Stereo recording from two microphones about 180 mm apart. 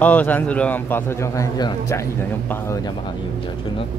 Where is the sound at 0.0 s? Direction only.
10° left (ahead or behind).